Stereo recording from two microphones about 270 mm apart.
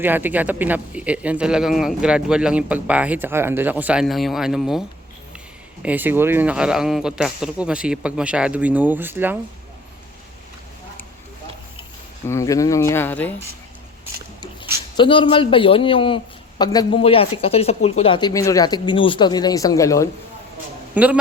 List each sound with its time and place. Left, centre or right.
0.0 s a man's voice: centre
5.8 s a man's voice: centre
12.3 s speech: centre
14.9 s a man's voice: centre
20.9 s a man's voice: centre